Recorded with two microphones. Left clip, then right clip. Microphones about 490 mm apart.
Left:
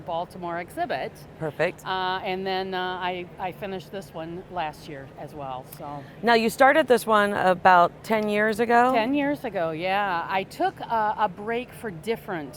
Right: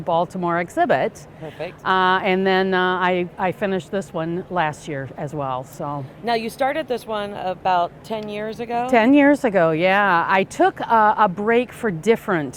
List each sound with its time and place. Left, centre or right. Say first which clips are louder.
0.1 s a woman's voice: right 10 dB; right
6.2 s speech: left 3 dB; left
8.9 s a woman's voice: right 9 dB; right